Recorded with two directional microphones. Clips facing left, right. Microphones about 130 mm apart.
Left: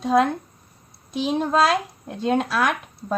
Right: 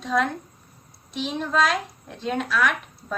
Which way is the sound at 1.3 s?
35° left (ahead or behind).